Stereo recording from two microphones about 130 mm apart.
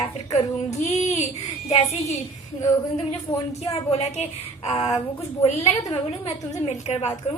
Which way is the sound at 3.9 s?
55° left (ahead or behind).